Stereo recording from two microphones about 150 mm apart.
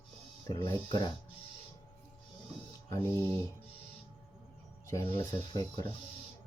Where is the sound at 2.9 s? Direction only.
15° left (ahead or behind).